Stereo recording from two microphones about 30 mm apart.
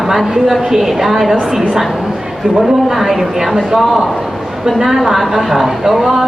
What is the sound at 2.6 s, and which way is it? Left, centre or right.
A man's voice, centre.